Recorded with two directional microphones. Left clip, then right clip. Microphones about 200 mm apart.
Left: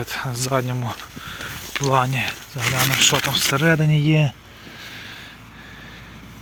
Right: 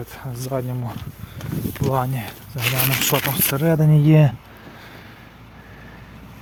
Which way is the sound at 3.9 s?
20° right (ahead or behind).